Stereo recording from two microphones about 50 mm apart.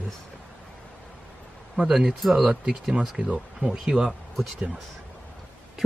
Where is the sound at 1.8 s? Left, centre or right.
Centre.